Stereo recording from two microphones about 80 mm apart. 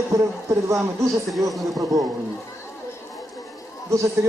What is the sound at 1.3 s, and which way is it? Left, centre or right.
Speech, centre.